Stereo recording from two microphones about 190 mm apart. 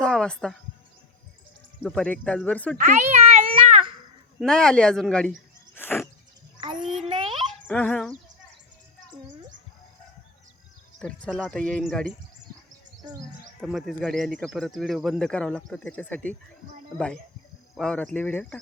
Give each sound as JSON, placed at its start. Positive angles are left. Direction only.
{"t": 0.0, "sound": "a sound", "side_deg": 5}
{"t": 1.8, "sound": "speech", "side_deg": 5}
{"t": 2.7, "sound": "a sound", "side_deg": -40}
{"t": 4.4, "sound": "speech", "side_deg": 5}
{"t": 6.6, "sound": "child singing", "side_deg": -25}
{"t": 6.8, "sound": "a sound", "side_deg": 0}
{"t": 7.7, "sound": "speech", "side_deg": 5}
{"t": 11.0, "sound": "speech", "side_deg": 5}
{"t": 13.0, "sound": "speech", "side_deg": -20}
{"t": 13.6, "sound": "speech", "side_deg": 0}
{"t": 17.7, "sound": "speech", "side_deg": 5}